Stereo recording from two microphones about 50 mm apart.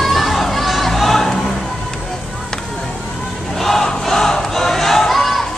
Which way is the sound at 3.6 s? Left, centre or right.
Centre.